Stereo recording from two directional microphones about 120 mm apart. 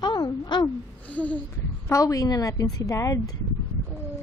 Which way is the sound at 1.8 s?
25° left (ahead or behind).